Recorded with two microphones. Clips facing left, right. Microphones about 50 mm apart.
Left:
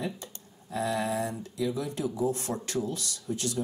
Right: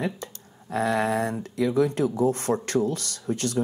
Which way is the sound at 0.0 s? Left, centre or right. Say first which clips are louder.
Right 5 dB; right.